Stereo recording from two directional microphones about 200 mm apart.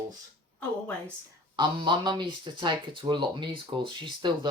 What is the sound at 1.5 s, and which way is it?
Speech, 20° right (ahead or behind).